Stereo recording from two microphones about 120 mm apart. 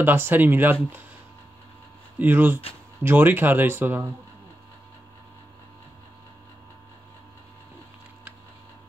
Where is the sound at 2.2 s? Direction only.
15° right (ahead or behind).